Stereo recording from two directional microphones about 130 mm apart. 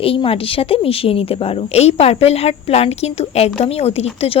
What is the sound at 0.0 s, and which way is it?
Speech, 45° left (ahead or behind).